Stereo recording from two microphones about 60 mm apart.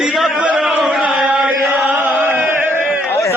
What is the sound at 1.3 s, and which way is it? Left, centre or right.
Chant, right.